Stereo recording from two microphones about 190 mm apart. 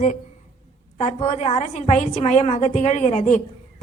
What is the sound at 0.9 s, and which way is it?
A woman's voice, 35° left (ahead or behind).